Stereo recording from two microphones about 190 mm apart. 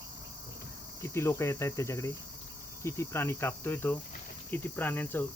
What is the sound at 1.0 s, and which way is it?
Speech, 15° left (ahead or behind).